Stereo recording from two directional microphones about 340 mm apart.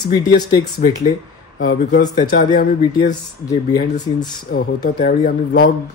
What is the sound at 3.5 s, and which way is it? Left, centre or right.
Speech, centre.